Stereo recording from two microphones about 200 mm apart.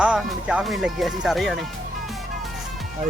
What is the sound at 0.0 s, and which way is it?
Speech, 5° right (ahead or behind).